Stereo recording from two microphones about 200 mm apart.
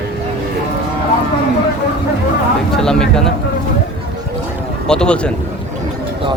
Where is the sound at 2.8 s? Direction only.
5° left (ahead or behind).